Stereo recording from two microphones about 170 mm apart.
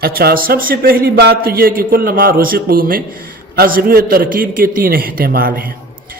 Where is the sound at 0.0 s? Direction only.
65° right (ahead or behind).